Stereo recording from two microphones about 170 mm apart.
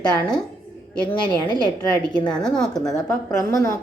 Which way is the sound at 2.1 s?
25° left (ahead or behind).